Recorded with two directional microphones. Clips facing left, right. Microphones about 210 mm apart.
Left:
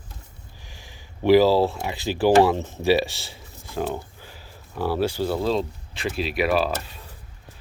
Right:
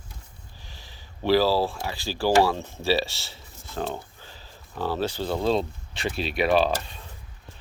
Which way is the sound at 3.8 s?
10° left (ahead or behind).